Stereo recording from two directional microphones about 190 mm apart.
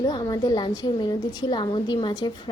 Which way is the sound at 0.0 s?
20° left (ahead or behind).